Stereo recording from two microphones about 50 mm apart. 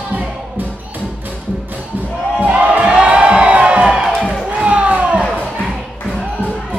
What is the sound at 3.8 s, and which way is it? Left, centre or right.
Music, centre.